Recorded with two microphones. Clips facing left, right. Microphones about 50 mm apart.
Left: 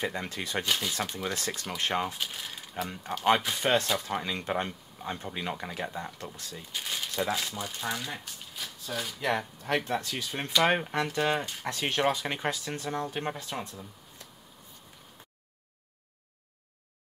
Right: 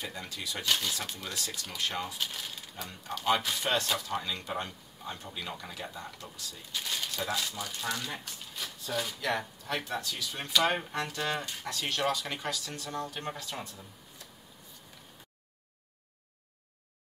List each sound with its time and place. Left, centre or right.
0.0 s speech: left
0.7 s speech: centre
0.9 s speech: left
6.7 s crumpling: centre
7.2 s speech: left
8.0 s speech: centre
9.2 s speech: left
9.6 s speech: left